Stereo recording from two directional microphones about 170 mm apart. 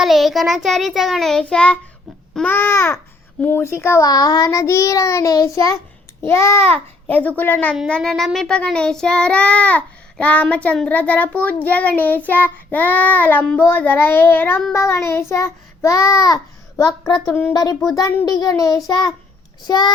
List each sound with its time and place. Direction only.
0.0 s child singing: centre (ahead or behind)
3.4 s a child's voice: 15° left (ahead or behind)
6.2 s child singing: 15° left (ahead or behind)
17.2 s child singing: 10° left (ahead or behind)
17.5 s a child's voice: 20° left (ahead or behind)